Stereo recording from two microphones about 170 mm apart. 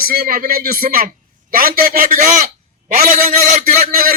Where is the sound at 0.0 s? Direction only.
60° right (ahead or behind).